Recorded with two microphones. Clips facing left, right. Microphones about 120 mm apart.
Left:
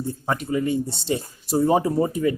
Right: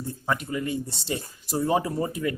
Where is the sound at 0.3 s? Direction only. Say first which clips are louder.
Left 4 dB; 25° left (ahead or behind).